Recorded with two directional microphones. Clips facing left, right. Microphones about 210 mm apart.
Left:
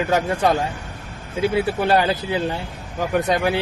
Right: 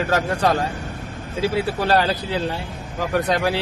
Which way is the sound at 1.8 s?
20° left (ahead or behind).